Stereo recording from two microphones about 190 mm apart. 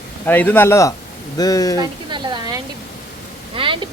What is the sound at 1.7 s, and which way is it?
Speech, 20° right (ahead or behind).